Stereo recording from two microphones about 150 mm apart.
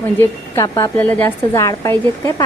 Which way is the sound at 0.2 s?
20° left (ahead or behind).